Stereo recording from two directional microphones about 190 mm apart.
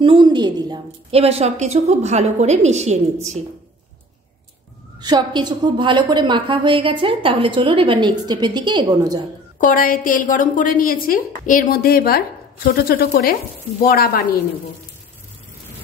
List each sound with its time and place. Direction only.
0.0 s a woman's voice: 25° right (ahead or behind)
5.0 s a woman's voice: 20° right (ahead or behind)
9.6 s a woman's voice: 45° left (ahead or behind)